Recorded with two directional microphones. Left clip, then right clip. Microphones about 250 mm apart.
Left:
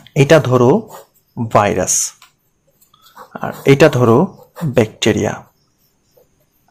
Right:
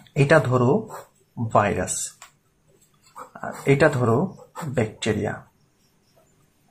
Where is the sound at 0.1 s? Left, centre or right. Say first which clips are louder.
Left 8 dB; left.